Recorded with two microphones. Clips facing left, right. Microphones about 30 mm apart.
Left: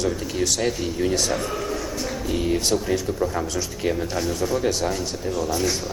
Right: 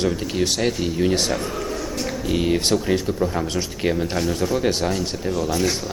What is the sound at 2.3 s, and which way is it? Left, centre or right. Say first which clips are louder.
Speech: right 3 dB; right.